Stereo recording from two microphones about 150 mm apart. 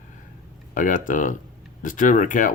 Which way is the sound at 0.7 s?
60° left (ahead or behind).